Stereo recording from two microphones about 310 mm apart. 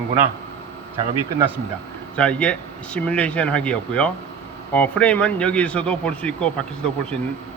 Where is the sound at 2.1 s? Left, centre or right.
Centre.